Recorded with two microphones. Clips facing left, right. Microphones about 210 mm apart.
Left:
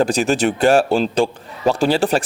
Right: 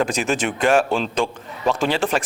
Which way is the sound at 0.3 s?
35° left (ahead or behind).